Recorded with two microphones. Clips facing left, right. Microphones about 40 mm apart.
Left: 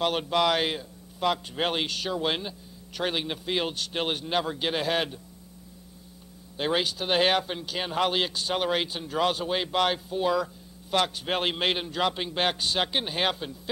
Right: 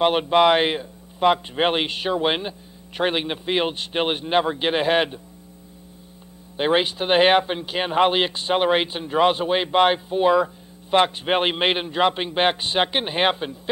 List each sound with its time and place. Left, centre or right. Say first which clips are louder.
0.0 s speech: right 8 dB; right
6.5 s speech: right 7 dB; right